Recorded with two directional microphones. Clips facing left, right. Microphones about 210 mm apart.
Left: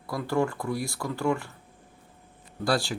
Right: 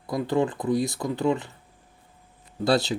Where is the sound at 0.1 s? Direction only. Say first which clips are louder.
Right 3 dB; 20° right (ahead or behind).